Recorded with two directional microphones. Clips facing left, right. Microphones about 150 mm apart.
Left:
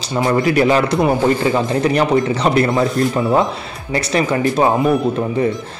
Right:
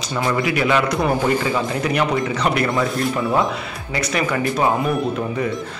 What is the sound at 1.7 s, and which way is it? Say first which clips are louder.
Speech: left 5 dB; 35° left (ahead or behind).